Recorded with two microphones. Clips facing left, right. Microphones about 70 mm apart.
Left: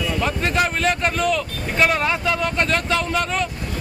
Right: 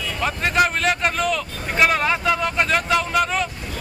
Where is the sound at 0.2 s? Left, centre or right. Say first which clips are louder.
Right 3 dB; centre.